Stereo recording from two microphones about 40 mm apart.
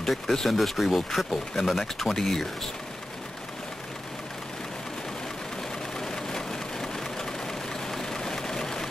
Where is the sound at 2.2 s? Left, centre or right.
Centre.